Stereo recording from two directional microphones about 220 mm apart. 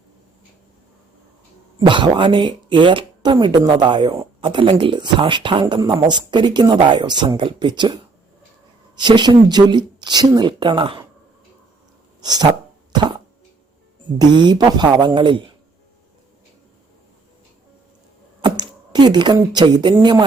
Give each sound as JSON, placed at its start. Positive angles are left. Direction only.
{"t": 1.8, "sound": "speech", "side_deg": -20}
{"t": 9.0, "sound": "speech", "side_deg": -20}
{"t": 12.2, "sound": "speech", "side_deg": -20}
{"t": 12.9, "sound": "a sound", "side_deg": -20}
{"t": 14.2, "sound": "speech", "side_deg": -20}
{"t": 18.4, "sound": "speech", "side_deg": -20}